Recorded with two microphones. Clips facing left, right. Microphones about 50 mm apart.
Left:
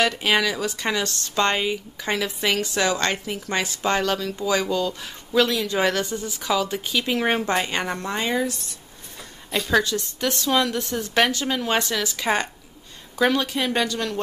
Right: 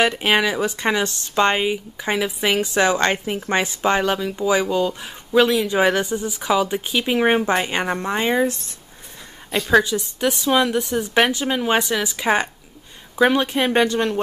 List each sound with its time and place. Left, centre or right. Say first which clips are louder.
0.0 s speech: right 3 dB; right
9.5 s a woman's voice: right 4 dB; centre